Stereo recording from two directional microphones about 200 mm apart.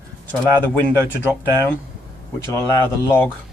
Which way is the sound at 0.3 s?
10° left (ahead or behind).